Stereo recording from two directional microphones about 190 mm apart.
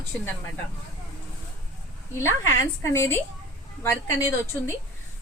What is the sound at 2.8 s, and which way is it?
A woman's voice, 15° left (ahead or behind).